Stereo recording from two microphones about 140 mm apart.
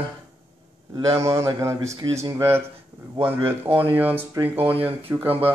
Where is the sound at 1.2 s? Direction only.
20° right (ahead or behind).